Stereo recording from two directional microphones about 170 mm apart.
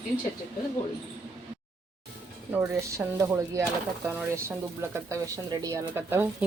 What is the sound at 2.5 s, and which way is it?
Speech, 15° right (ahead or behind).